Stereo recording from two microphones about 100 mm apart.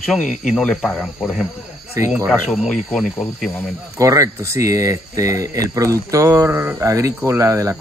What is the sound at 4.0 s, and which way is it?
Speech, 35° right (ahead or behind).